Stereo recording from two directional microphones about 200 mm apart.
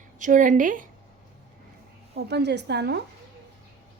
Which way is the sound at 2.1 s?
55° right (ahead or behind).